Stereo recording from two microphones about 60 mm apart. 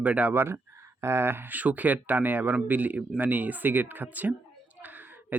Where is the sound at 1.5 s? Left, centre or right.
Right.